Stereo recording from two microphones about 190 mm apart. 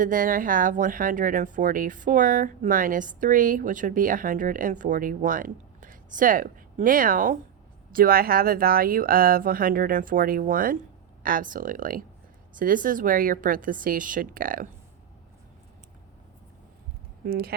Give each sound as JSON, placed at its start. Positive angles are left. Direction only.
{"t": 0.0, "sound": "speech", "side_deg": -45}
{"t": 17.2, "sound": "speech", "side_deg": -55}